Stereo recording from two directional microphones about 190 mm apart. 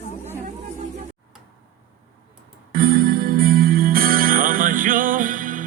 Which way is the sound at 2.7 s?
50° right (ahead or behind).